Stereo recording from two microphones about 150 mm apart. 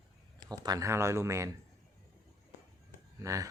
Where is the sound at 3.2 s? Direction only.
20° right (ahead or behind).